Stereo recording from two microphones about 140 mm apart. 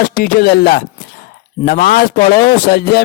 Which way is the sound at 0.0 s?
90° left.